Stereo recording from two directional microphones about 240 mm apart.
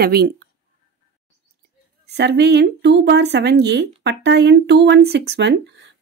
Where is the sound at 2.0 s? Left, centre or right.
Right.